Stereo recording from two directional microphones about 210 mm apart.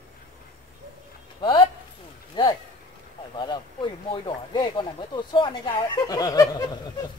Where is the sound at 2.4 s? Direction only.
20° left (ahead or behind).